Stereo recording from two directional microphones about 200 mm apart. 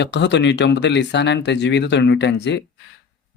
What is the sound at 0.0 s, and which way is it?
Speech, 60° left (ahead or behind).